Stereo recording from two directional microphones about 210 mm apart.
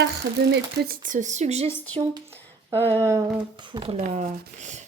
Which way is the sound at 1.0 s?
35° right (ahead or behind).